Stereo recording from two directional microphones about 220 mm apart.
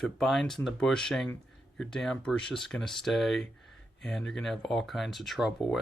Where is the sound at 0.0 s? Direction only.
Centre (ahead or behind).